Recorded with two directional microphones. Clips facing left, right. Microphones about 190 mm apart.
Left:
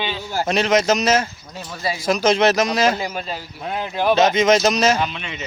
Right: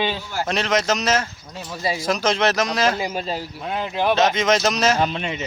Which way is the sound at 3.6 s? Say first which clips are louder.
Left 2 dB; 5° left (ahead or behind).